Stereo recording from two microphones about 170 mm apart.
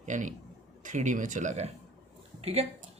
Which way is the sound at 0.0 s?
45° right (ahead or behind).